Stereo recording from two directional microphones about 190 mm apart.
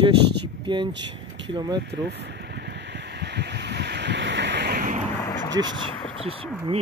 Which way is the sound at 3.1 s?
65° right (ahead or behind).